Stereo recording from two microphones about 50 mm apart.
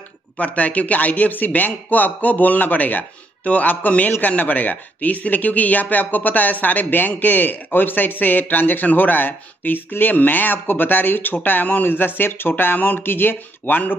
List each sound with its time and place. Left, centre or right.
0.4 s speech: left